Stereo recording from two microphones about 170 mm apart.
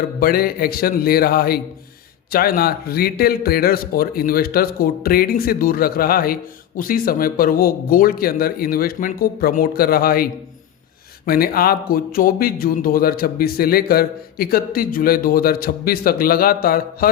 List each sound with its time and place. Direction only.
0.2 s a man's voice: 60° left (ahead or behind)
11.3 s a man's voice: 60° left (ahead or behind)